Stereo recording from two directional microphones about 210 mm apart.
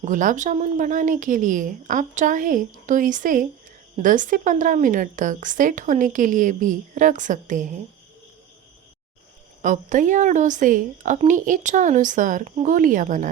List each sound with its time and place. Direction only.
0.0 s a woman's voice: 40° right (ahead or behind)
9.6 s a woman's voice: 35° right (ahead or behind)